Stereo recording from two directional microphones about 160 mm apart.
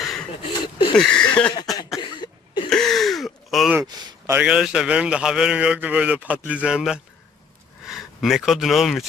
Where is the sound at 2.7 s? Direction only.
Centre (ahead or behind).